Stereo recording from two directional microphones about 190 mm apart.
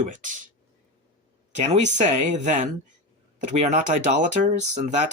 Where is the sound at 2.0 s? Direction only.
40° right (ahead or behind).